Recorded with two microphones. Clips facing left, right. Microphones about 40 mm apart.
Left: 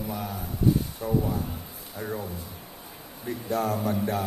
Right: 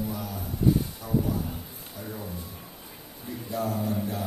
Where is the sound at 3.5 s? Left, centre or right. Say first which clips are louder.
Left 3 dB; left.